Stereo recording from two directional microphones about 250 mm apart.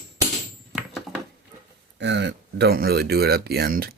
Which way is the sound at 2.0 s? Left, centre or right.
Right.